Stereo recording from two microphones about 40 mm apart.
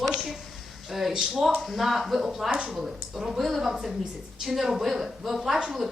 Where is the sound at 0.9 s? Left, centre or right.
Centre.